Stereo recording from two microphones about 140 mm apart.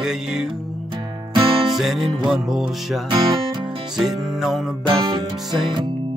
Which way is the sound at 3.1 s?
30° right (ahead or behind).